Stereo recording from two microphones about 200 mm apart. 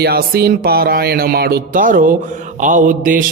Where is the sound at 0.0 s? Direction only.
50° right (ahead or behind).